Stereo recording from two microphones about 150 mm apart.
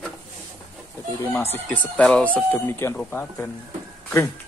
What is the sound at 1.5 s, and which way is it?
Speech, 10° left (ahead or behind).